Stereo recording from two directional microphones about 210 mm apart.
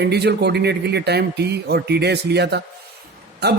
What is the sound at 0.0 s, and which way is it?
A man's voice, 50° right (ahead or behind).